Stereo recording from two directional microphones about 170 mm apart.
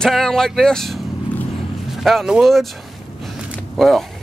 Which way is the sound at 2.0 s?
Centre (ahead or behind).